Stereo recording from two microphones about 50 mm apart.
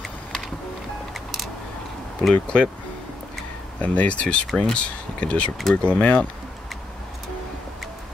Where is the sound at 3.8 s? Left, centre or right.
Left.